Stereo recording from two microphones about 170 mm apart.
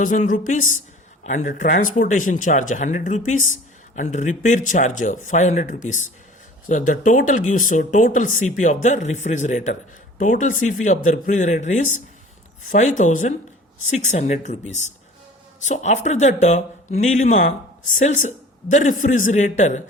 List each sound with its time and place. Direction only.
0.0 s speech: 50° left (ahead or behind)